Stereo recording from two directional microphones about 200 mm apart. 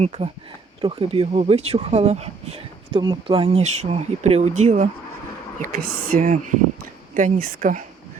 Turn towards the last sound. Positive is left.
turn(degrees=-40)  # may be behind; listen again after turning